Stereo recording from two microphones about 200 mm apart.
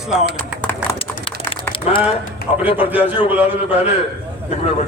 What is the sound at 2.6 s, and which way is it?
Speech, 10° right (ahead or behind).